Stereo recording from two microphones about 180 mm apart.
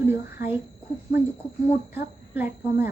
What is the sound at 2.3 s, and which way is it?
Speech, 10° right (ahead or behind).